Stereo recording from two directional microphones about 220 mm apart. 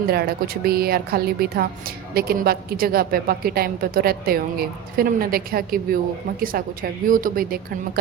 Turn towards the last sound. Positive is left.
turn(degrees=-40)  # may be behind; listen again after turning